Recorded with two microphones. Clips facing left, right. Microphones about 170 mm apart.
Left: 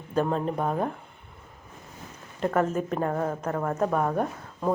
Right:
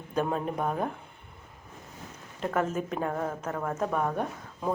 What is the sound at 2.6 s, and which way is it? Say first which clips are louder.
Speech: left 3 dB; 5° right (ahead or behind).